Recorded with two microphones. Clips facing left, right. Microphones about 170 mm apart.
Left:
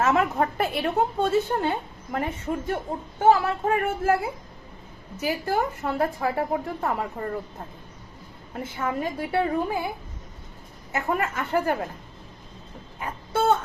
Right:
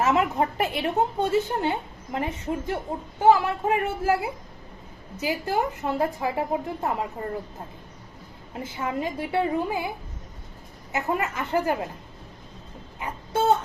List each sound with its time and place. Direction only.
0.0 s a woman's voice: 20° right (ahead or behind)
8.5 s a woman's voice: 20° right (ahead or behind)
10.9 s a woman's voice: 20° right (ahead or behind)
13.0 s a sound: 20° right (ahead or behind)